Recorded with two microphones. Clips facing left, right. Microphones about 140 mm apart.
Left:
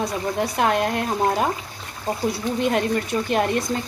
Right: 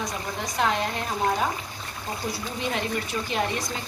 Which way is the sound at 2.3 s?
55° left (ahead or behind).